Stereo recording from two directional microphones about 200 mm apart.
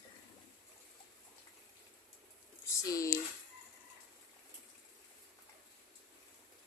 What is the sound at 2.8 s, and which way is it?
Speech, 15° left (ahead or behind).